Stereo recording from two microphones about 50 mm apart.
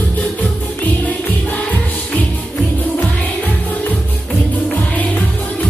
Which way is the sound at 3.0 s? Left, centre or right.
Left.